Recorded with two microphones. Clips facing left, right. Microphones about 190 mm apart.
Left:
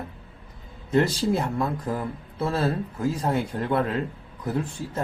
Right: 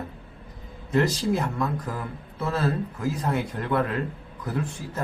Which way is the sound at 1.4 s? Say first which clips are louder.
Left 1 dB; 25° left (ahead or behind).